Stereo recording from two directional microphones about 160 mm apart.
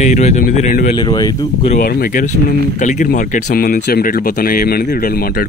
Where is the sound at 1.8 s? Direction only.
65° left (ahead or behind).